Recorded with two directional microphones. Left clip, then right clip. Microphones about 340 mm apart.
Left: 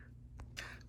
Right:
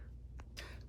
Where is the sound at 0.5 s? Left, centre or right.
Centre.